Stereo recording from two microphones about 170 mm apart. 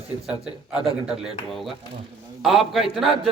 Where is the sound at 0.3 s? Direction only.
5° right (ahead or behind).